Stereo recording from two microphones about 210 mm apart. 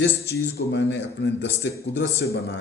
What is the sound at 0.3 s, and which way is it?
A man's voice, 55° left (ahead or behind).